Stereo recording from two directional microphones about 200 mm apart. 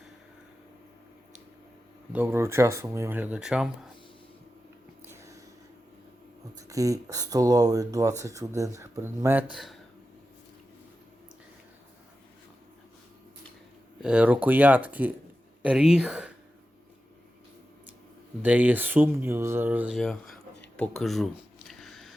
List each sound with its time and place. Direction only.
2.1 s speech: 10° right (ahead or behind)
5.0 s a sound: 15° right (ahead or behind)
6.6 s speech: 15° right (ahead or behind)
14.0 s speech: 5° right (ahead or behind)
18.4 s speech: 10° right (ahead or behind)
20.7 s a sound: 5° left (ahead or behind)